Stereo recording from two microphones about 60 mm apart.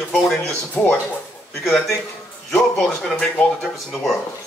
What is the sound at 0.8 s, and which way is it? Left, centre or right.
Speech, left.